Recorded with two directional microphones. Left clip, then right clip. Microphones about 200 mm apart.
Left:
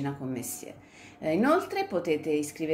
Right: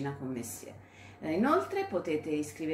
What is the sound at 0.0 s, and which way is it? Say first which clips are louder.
A woman's voice: left 3 dB; 45° left (ahead or behind).